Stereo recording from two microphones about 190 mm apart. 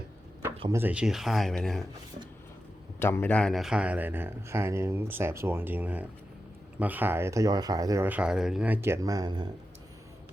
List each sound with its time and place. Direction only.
0.7 s speech: 10° right (ahead or behind)
3.0 s speech: 10° left (ahead or behind); by 9.5 s 20° right (ahead or behind)